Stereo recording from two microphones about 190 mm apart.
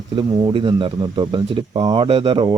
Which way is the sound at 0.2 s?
25° right (ahead or behind).